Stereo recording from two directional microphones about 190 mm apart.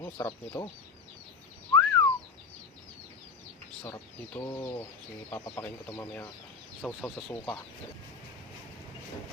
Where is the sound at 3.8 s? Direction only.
15° left (ahead or behind).